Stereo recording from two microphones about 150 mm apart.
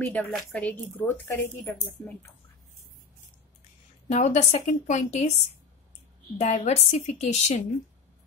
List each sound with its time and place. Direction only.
0.0 s a woman's voice: 10° left (ahead or behind)
4.1 s a woman's voice: 50° left (ahead or behind)
6.3 s a woman's voice: 50° left (ahead or behind)